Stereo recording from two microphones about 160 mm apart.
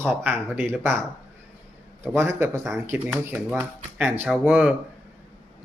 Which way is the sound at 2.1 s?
15° right (ahead or behind).